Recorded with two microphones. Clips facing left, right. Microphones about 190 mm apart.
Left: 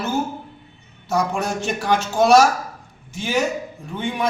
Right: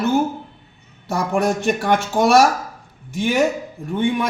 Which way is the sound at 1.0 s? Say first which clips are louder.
Right 3 dB; 55° right (ahead or behind).